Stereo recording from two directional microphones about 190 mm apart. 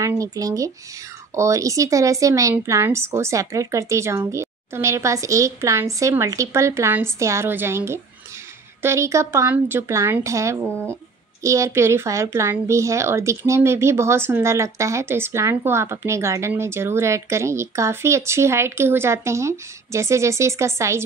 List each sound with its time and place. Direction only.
0.0 s a woman's voice: 15° right (ahead or behind)